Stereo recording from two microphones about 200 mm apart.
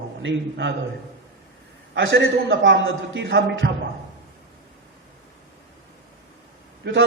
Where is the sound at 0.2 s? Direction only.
65° right (ahead or behind).